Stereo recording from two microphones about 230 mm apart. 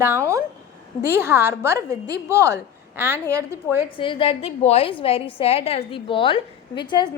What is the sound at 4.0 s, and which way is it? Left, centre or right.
A woman's voice, left.